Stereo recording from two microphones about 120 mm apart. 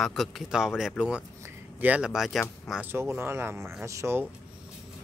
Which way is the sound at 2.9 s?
20° right (ahead or behind).